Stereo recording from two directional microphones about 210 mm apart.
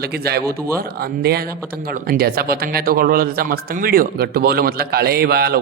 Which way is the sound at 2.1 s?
45° right (ahead or behind).